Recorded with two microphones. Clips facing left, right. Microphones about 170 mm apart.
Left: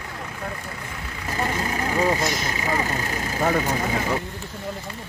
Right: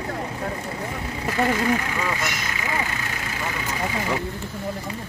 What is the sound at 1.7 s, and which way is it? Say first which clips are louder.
Speech: left 5 dB; 35° left (ahead or behind).